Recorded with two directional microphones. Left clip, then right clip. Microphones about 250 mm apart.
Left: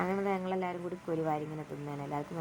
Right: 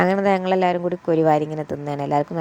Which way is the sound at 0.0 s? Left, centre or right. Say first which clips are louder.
Right 14 dB; right.